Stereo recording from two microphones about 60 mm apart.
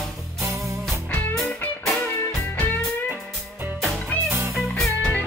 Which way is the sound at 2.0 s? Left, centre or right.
Left.